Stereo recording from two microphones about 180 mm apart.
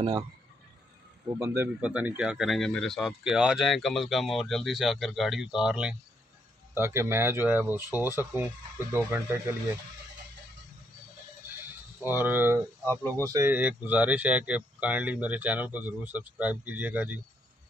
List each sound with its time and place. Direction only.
1.4 s speech: 10° right (ahead or behind)
12.0 s speech: 10° right (ahead or behind)